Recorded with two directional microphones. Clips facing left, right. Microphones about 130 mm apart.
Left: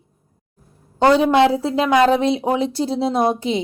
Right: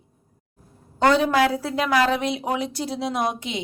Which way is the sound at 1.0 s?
30° left (ahead or behind).